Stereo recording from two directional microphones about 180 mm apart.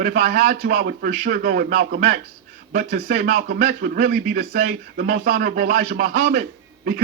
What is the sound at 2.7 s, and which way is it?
A man's voice, 50° right (ahead or behind).